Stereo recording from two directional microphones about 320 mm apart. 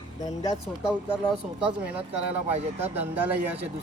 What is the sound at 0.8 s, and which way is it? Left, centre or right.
Speech, centre.